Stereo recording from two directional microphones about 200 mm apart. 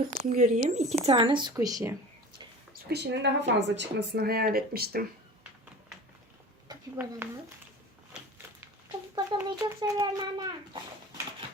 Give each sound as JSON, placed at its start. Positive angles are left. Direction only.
{"t": 0.2, "sound": "speech", "side_deg": -40}
{"t": 2.9, "sound": "a woman's voice", "side_deg": -55}
{"t": 6.7, "sound": "a woman's voice", "side_deg": -15}
{"t": 9.1, "sound": "speech", "side_deg": -15}